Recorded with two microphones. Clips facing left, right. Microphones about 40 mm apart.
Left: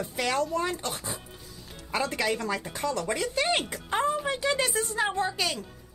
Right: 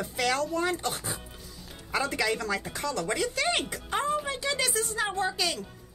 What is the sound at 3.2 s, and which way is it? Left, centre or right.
Speech, left.